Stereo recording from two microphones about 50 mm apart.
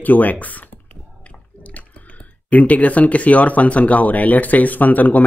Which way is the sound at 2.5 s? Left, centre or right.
Left.